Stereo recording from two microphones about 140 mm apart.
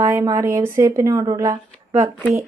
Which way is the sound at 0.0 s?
20° right (ahead or behind).